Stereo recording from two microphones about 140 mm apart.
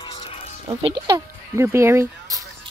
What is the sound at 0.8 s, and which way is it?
Speech, 35° right (ahead or behind).